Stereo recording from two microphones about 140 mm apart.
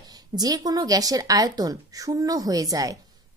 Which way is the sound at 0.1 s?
30° right (ahead or behind).